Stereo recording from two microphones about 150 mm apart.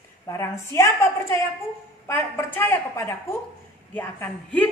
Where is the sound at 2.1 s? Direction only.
15° left (ahead or behind).